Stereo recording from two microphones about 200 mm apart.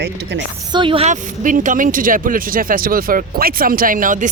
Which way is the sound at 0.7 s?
25° right (ahead or behind).